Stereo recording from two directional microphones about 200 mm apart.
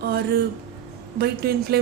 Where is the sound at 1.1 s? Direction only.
55° right (ahead or behind).